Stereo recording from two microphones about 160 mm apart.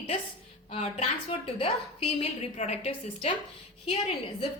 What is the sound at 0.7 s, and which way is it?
A woman's voice, 35° left (ahead or behind).